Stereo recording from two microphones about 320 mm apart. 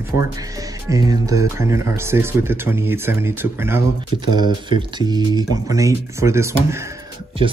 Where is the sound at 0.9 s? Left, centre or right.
Centre.